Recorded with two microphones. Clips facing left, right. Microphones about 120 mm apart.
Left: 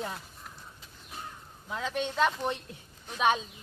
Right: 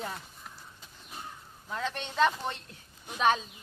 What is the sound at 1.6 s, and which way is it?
Speech, 5° left (ahead or behind).